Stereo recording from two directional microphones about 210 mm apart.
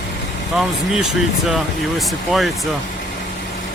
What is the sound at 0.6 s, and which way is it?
Speech, 5° right (ahead or behind).